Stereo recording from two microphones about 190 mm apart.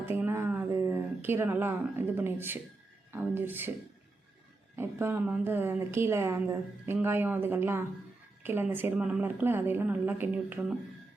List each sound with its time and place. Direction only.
0.0 s a woman's voice: 10° right (ahead or behind)
4.8 s a woman's voice: 10° right (ahead or behind)